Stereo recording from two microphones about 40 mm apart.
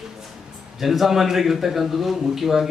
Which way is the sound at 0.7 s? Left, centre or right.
Centre.